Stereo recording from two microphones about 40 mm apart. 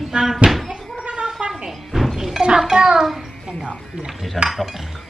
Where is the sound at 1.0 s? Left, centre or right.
Right.